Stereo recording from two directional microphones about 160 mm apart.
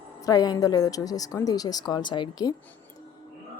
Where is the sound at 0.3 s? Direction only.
25° left (ahead or behind).